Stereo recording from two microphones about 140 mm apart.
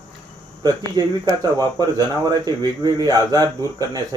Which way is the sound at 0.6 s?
25° right (ahead or behind).